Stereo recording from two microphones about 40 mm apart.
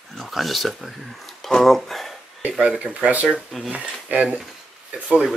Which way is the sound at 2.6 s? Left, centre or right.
Right.